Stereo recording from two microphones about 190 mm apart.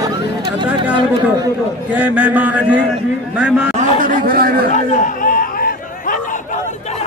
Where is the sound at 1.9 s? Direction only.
10° right (ahead or behind).